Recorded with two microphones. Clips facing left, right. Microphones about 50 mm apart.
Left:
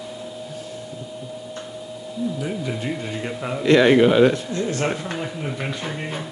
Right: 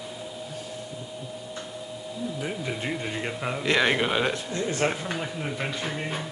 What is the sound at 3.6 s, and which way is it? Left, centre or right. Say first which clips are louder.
Speech: left 10 dB; centre.